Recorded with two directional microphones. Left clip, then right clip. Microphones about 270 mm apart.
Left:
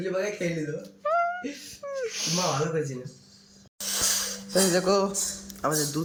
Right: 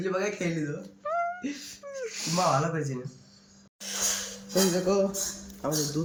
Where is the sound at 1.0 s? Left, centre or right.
Centre.